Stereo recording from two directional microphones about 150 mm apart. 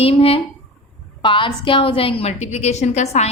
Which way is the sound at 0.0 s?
40° left (ahead or behind).